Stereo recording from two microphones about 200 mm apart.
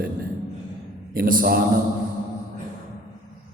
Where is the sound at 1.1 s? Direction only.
45° right (ahead or behind).